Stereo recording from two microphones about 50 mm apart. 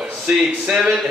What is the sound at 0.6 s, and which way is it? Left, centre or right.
Speech, centre.